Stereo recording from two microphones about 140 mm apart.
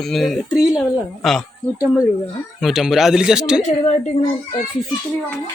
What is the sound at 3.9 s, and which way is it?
Speech, 50° left (ahead or behind).